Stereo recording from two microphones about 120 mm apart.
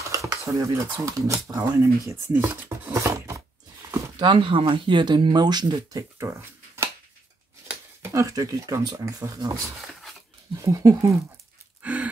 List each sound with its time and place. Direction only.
0.1 s a sound: 25° right (ahead or behind)
1.0 s speech: 25° right (ahead or behind)
2.0 s speech: 15° right (ahead or behind)
2.9 s a sound: 25° right (ahead or behind)
4.2 s speech: 45° right (ahead or behind)
6.1 s a sound: 20° right (ahead or behind)
8.0 s speech: 25° right (ahead or behind)
10.6 s speech: 30° right (ahead or behind)
11.8 s gasp: 10° right (ahead or behind)